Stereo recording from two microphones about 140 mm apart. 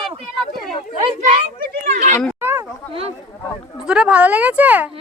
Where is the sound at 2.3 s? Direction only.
15° right (ahead or behind).